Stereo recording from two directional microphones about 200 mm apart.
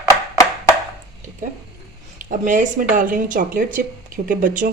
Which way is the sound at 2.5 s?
40° right (ahead or behind).